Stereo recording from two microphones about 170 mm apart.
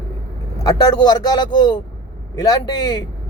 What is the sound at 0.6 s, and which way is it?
Speech, 25° left (ahead or behind).